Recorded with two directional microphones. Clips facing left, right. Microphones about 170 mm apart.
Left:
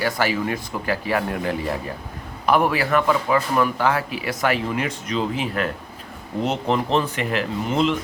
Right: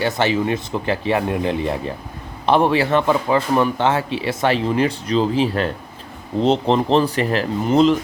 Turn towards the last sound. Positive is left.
turn(degrees=-40)  # may be behind; listen again after turning